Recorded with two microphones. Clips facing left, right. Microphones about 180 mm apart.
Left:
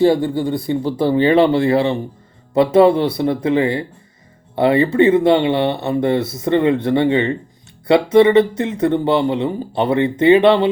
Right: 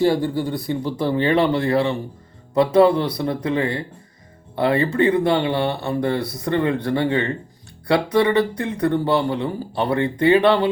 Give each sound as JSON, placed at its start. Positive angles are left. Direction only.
{"t": 0.0, "sound": "speech", "side_deg": 25}